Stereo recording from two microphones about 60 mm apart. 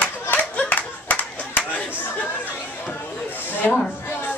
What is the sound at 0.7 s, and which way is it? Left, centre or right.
Clapping, left.